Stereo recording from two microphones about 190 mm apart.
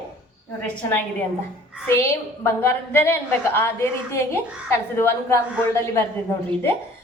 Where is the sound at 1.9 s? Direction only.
15° left (ahead or behind).